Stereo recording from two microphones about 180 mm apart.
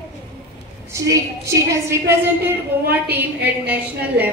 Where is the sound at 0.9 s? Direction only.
15° right (ahead or behind).